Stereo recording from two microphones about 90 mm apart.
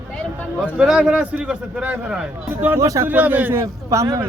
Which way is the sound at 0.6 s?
5° right (ahead or behind).